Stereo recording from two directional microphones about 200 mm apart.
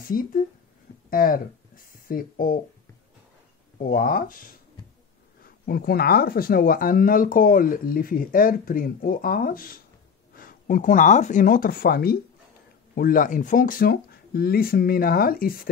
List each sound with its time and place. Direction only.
0.1 s speech: 45° left (ahead or behind)
3.7 s speech: 45° left (ahead or behind)